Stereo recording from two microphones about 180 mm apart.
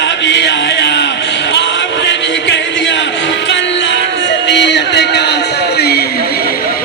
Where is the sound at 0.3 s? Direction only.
75° left (ahead or behind).